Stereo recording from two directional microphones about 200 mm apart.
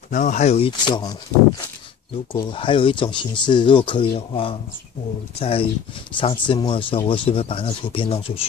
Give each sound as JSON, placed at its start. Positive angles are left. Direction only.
{"t": 0.1, "sound": "speech", "side_deg": 40}
{"t": 2.3, "sound": "speech", "side_deg": 25}